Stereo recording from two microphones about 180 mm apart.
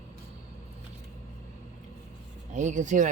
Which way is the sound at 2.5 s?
45° right (ahead or behind).